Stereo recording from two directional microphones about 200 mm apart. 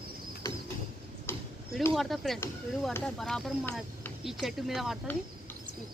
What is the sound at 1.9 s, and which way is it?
Speech, centre (ahead or behind).